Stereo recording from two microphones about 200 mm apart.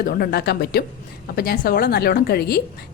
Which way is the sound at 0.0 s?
50° left (ahead or behind).